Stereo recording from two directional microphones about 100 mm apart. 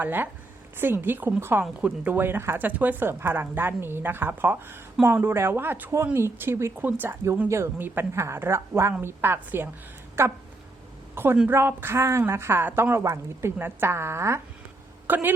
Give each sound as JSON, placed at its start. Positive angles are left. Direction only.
{"t": 0.0, "sound": "a woman's voice", "side_deg": -20}